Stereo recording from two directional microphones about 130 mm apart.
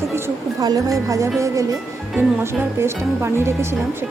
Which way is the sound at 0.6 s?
25° right (ahead or behind).